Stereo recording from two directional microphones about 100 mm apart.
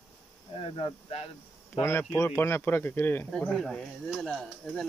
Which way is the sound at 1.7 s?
25° left (ahead or behind).